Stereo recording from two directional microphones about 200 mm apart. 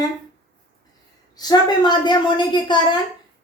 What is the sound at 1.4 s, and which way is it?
A child's voice, 20° left (ahead or behind).